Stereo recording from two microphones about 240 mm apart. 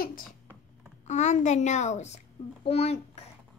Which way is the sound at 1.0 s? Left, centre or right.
Left.